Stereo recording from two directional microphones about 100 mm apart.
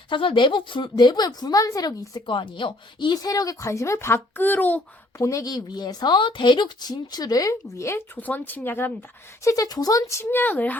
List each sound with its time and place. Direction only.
0.1 s a woman's voice: 55° left (ahead or behind)
3.2 s speech: 35° left (ahead or behind); by 4.8 s 20° left (ahead or behind)
5.1 s a woman's voice: 30° left (ahead or behind); by 10.8 s 15° left (ahead or behind)